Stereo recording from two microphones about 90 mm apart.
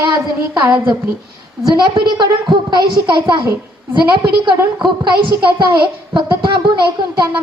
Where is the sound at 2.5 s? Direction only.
55° right (ahead or behind).